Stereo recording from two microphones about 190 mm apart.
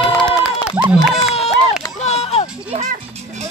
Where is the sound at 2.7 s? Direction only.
35° right (ahead or behind).